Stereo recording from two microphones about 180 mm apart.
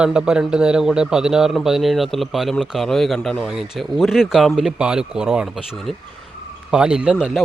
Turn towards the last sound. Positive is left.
turn(degrees=-5)  # may be behind; listen again after turning